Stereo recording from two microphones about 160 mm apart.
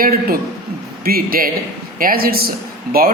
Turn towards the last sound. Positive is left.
turn(degrees=-65)  # may be behind; listen again after turning